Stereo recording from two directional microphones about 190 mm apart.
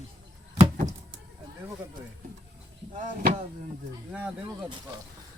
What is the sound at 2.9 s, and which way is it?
Speech, 45° right (ahead or behind).